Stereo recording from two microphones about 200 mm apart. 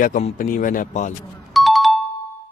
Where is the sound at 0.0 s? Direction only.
40° left (ahead or behind).